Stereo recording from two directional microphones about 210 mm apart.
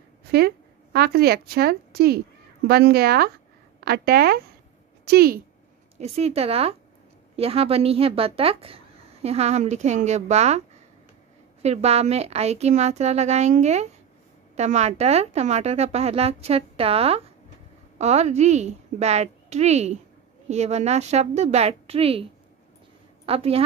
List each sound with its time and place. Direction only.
0.3 s a woman's voice: 50° right (ahead or behind)
5.9 s a woman's voice: 30° right (ahead or behind)
11.6 s a woman's voice: 30° right (ahead or behind)